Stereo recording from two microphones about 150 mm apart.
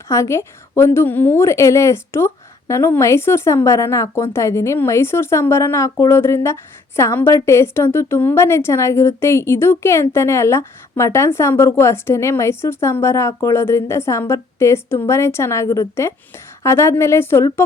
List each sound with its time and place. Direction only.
0.1 s a woman's voice: 20° left (ahead or behind)